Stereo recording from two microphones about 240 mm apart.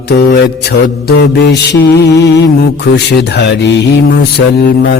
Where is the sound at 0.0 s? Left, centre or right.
Left.